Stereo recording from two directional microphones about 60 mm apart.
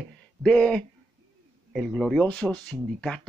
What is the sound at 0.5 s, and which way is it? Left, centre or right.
Speech, centre.